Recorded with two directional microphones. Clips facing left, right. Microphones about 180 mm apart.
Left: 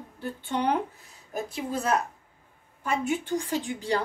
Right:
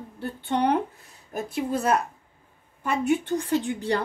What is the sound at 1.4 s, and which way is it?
A woman's voice, 60° right (ahead or behind).